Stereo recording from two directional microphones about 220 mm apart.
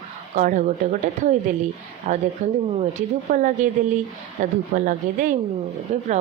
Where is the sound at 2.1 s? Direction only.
35° right (ahead or behind).